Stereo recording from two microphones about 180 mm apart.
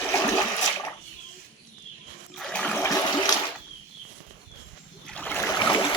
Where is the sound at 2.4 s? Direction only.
5° left (ahead or behind).